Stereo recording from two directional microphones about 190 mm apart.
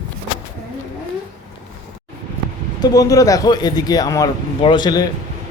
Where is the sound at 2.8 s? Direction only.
20° left (ahead or behind).